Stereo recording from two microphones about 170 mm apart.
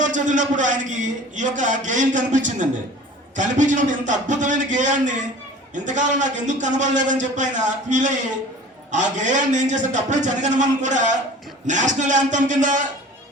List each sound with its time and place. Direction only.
0.0 s a man's voice: 45° right (ahead or behind)